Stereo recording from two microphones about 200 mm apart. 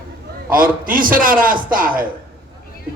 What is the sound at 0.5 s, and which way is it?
A man's voice, 45° right (ahead or behind).